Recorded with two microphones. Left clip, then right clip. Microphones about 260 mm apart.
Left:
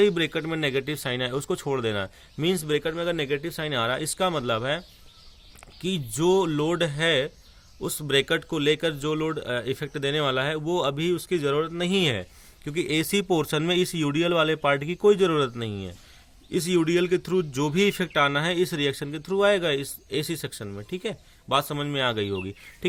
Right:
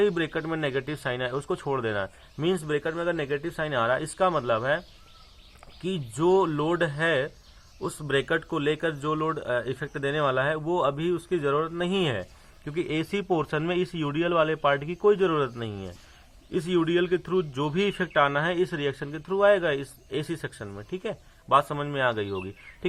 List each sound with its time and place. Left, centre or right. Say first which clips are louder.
0.0 s speech: left 3 dB; left
5.8 s speech: left 1 dB; left